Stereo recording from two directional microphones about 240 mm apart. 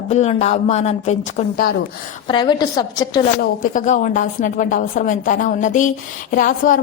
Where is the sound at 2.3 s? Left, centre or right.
Centre.